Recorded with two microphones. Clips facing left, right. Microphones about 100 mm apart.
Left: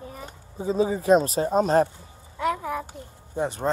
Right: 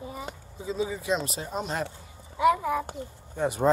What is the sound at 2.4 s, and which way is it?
Speech, centre (ahead or behind).